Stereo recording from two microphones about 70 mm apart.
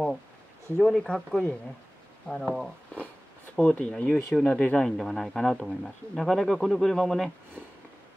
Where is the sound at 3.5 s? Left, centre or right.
Centre.